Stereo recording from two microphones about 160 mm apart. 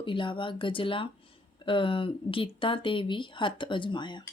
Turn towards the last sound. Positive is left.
turn(degrees=30)  # may be behind; listen again after turning